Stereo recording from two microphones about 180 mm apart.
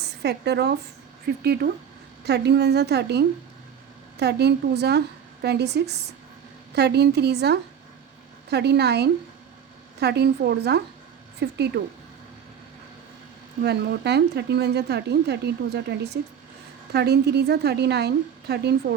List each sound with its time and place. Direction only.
0.2 s speech: 65° right (ahead or behind)
13.6 s speech: 65° right (ahead or behind)